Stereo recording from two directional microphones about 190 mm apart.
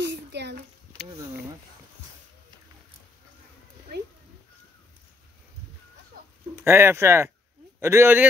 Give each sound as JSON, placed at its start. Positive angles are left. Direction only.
{"t": 0.0, "sound": "a sound", "side_deg": -65}
{"t": 1.1, "sound": "a man's voice", "side_deg": -15}
{"t": 6.5, "sound": "a man's voice", "side_deg": -15}